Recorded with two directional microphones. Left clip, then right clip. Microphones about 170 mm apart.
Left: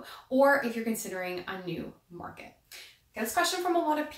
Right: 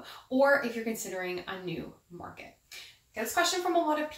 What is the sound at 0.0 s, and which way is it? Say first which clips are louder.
A woman's voice: left 2 dB; 25° left (ahead or behind).